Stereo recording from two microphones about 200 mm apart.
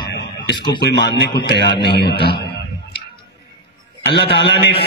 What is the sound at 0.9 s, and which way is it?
A man's voice, 55° left (ahead or behind).